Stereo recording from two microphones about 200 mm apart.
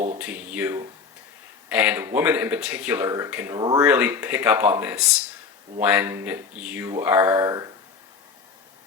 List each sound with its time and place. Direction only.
0.2 s speech: 5° right (ahead or behind)
3.6 s speech: 20° right (ahead or behind)
3.8 s speech: 10° right (ahead or behind)